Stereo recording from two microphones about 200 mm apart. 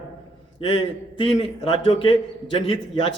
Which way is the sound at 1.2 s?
25° left (ahead or behind).